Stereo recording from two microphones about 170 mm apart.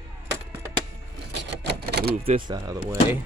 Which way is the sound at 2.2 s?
30° right (ahead or behind).